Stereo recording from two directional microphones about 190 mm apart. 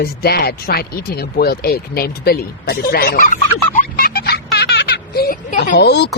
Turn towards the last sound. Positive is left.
turn(degrees=60)  # may be behind; listen again after turning